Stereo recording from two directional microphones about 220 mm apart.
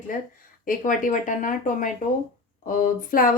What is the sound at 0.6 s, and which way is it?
Speech, 35° left (ahead or behind).